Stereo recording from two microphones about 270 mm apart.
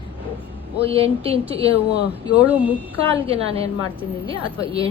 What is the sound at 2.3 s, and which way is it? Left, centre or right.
Speech, centre.